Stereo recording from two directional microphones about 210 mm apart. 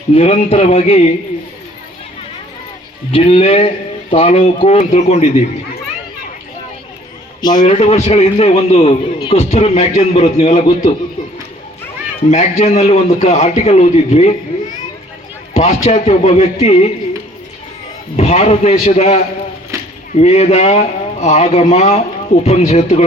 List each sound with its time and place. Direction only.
0.1 s speech: 30° left (ahead or behind)
3.1 s speech: 30° left (ahead or behind)
7.6 s a man's voice: 30° left (ahead or behind)
12.3 s a man's voice: 30° left (ahead or behind)
15.5 s a man's voice: 35° left (ahead or behind)
18.2 s a man's voice: 30° left (ahead or behind)
19.7 s a sound: 15° right (ahead or behind)
20.1 s a man's voice: 30° left (ahead or behind)